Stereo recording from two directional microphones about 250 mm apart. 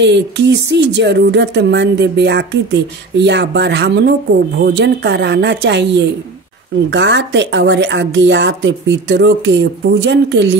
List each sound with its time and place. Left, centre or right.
0.0 s speech: right